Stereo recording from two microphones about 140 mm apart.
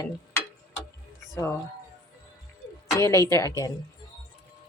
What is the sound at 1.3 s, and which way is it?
Speech, 20° left (ahead or behind).